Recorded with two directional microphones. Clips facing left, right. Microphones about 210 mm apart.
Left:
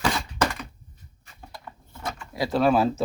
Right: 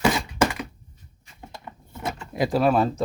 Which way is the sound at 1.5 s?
20° right (ahead or behind).